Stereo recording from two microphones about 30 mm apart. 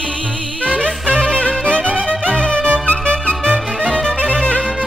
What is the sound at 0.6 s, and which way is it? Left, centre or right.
Music, left.